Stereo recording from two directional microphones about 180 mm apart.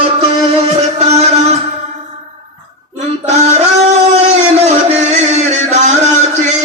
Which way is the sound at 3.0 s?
40° right (ahead or behind).